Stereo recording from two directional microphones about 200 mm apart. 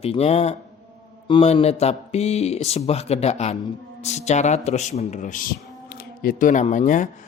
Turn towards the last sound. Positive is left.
turn(degrees=40)  # may be behind; listen again after turning